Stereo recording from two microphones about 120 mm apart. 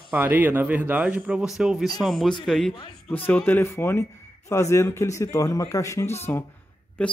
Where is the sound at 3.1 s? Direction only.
15° left (ahead or behind).